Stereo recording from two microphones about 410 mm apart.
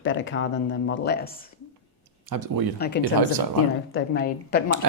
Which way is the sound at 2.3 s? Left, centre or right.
Right.